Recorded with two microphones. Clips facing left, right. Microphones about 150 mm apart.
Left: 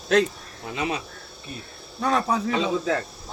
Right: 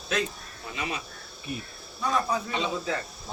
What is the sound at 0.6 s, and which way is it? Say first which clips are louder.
Speech: left 6 dB; 85° left.